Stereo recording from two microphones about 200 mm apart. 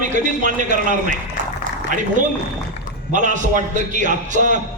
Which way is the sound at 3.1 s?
40° right (ahead or behind).